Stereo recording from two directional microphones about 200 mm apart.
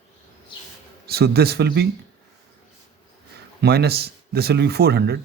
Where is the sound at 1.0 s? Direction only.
50° right (ahead or behind).